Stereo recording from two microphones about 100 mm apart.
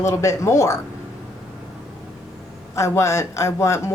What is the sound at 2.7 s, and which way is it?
A woman's voice, 30° left (ahead or behind).